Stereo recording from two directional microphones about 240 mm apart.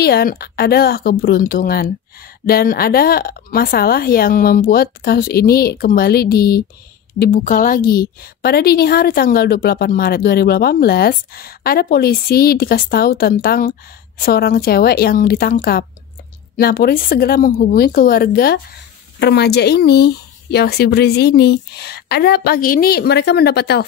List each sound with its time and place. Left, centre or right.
0.0 s a woman's voice: left